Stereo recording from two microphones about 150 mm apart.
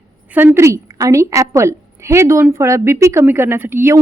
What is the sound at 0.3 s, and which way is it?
A woman's voice, 15° right (ahead or behind).